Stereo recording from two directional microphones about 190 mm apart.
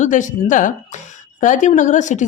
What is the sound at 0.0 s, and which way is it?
Speech, 40° left (ahead or behind).